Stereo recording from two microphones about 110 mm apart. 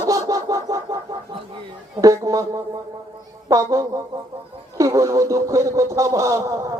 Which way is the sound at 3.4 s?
30° right (ahead or behind).